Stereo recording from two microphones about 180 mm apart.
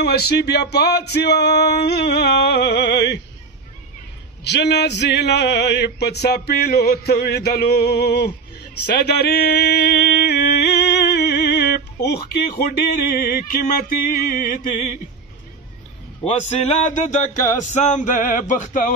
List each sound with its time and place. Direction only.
0.0 s male singing: 65° left (ahead or behind)
4.5 s male singing: 70° left (ahead or behind)
8.8 s a sound: 65° left (ahead or behind); by 14.8 s 45° left (ahead or behind)
16.3 s music: 40° left (ahead or behind)
17.7 s male singing: 45° left (ahead or behind)